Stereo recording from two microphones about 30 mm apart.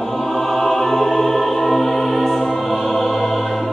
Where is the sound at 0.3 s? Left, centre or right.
Centre.